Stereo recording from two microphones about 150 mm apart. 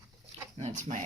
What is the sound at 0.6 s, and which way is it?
Speech, 50° right (ahead or behind).